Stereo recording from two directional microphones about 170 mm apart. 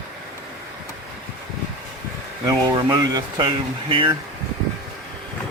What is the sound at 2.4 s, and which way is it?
Speech, 25° right (ahead or behind).